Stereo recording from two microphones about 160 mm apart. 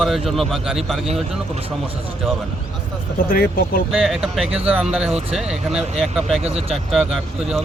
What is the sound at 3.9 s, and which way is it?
A man's voice, centre (ahead or behind).